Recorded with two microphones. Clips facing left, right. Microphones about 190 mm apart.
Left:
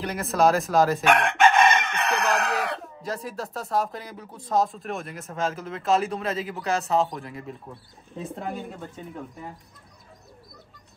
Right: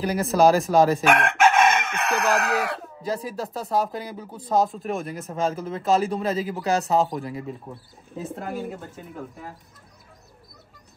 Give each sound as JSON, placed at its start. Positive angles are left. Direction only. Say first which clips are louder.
{"t": 0.0, "sound": "chicken", "louder": "right 3 dB", "side_deg": 0}
{"t": 4.2, "sound": "speech", "louder": "right 2 dB", "side_deg": 0}